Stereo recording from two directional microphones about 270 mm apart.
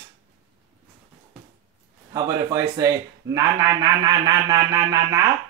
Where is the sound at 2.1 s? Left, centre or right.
Centre.